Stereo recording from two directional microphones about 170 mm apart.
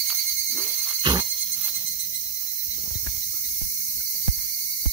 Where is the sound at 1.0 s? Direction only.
25° right (ahead or behind).